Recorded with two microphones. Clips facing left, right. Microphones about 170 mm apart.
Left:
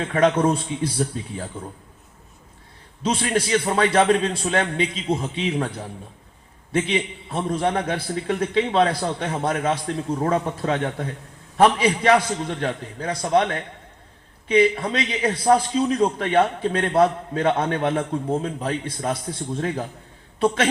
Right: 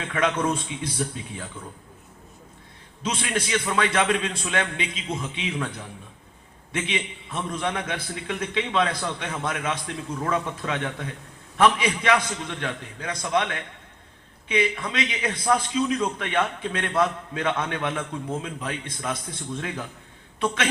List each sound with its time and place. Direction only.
0.0 s a man's voice: 40° left (ahead or behind)
3.0 s a man's voice: 35° left (ahead or behind)